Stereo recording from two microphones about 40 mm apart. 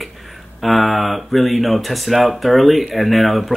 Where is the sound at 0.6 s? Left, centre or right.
Centre.